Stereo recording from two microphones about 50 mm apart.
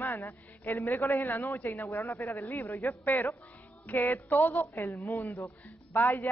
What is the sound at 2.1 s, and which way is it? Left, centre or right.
Speech, left.